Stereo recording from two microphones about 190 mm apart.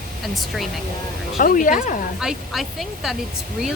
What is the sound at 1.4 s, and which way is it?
Speech, 45° left (ahead or behind).